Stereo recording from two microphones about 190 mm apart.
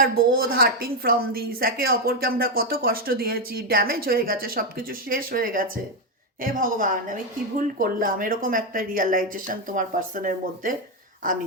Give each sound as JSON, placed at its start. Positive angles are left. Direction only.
{"t": 0.0, "sound": "speech", "side_deg": -50}